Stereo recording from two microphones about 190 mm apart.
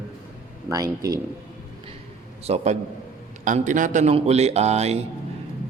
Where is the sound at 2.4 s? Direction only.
35° right (ahead or behind).